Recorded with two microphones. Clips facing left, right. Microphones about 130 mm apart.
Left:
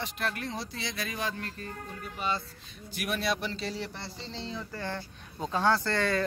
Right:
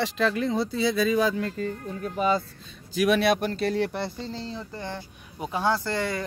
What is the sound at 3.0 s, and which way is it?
Speech, 65° right (ahead or behind).